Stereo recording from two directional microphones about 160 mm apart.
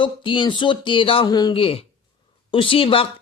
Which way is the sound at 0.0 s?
30° left (ahead or behind).